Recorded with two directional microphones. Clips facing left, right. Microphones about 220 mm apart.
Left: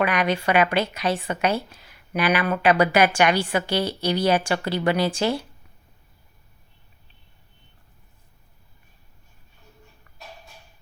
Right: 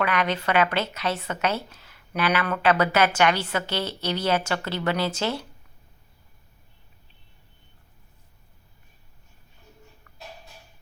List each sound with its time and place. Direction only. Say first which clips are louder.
0.0 s a woman's voice: left 3 dB; 15° left (ahead or behind)